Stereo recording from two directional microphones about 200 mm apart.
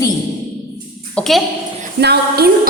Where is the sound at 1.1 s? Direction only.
Centre (ahead or behind).